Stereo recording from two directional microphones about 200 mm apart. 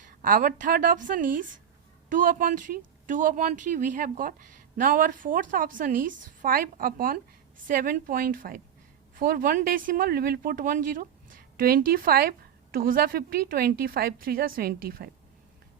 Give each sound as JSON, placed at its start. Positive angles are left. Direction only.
{"t": 0.0, "sound": "speech", "side_deg": -45}